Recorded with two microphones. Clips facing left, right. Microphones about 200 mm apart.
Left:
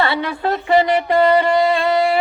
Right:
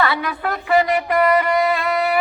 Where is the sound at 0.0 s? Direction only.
30° left (ahead or behind).